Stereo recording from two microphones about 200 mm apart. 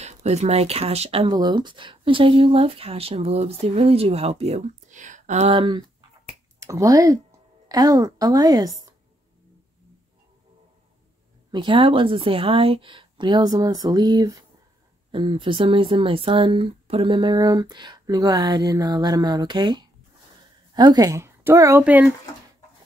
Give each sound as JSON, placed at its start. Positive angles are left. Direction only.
{"t": 0.0, "sound": "speech", "side_deg": -35}
{"t": 11.5, "sound": "speech", "side_deg": -25}